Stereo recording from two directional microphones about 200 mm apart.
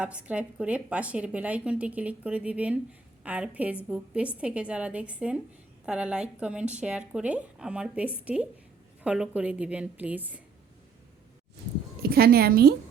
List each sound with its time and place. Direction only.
0.0 s speech: 5° right (ahead or behind)
12.0 s a woman's voice: 50° right (ahead or behind)